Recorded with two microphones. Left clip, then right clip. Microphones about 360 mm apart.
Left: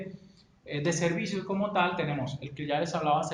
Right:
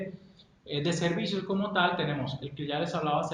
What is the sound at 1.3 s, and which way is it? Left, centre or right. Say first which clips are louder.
Speech: even; centre.